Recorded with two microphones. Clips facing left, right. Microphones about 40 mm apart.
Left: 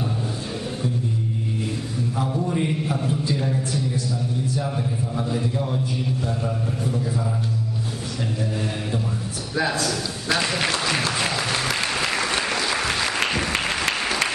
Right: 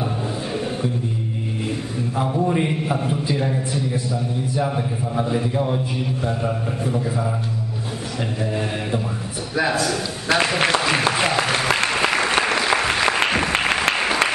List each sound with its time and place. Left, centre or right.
2.1 s a man's voice: right
9.6 s a man's voice: centre
10.8 s applause: right